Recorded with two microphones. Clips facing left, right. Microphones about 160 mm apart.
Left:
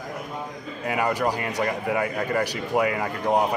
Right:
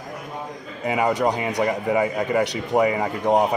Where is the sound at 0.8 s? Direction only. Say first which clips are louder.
Right 3 dB; 5° right (ahead or behind).